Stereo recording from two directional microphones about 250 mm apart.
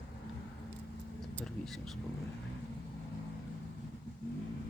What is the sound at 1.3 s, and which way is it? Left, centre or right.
Speech, centre.